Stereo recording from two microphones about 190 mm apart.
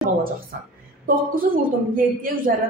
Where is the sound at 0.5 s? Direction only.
55° right (ahead or behind).